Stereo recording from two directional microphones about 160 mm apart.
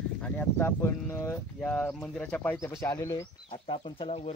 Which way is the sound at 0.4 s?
15° left (ahead or behind).